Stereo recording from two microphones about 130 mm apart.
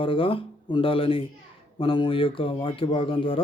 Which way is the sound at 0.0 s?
45° left (ahead or behind).